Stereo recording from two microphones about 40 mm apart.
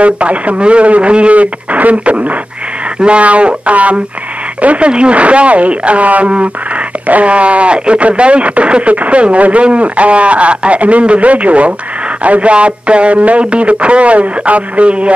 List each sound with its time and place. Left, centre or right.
0.0 s speech: right